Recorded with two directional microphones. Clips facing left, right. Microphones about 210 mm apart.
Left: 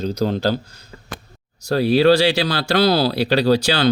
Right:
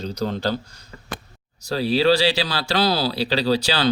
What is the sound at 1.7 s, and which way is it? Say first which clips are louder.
Speech: left 4 dB; 55° left (ahead or behind).